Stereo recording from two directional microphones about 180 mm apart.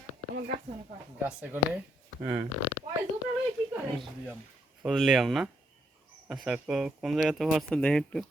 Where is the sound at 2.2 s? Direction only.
20° right (ahead or behind).